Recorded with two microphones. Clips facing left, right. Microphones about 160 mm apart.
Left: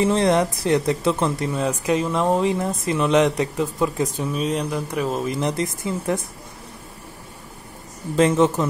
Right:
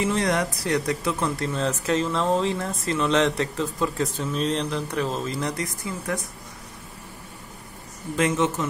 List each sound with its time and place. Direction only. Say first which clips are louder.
0.0 s speech: left 5 dB; 30° left (ahead or behind)
8.2 s a man's voice: left 6 dB; 35° left (ahead or behind)